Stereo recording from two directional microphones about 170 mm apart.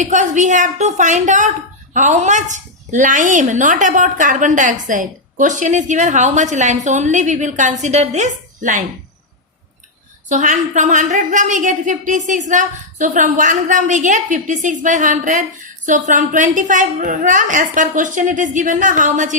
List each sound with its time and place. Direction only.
0.0 s a woman's voice: 45° right (ahead or behind)
10.2 s a woman's voice: 45° right (ahead or behind)